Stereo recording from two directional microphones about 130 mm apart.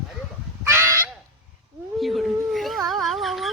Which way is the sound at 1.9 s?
Centre (ahead or behind).